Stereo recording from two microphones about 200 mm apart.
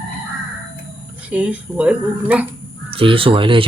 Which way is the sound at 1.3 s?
5° right (ahead or behind).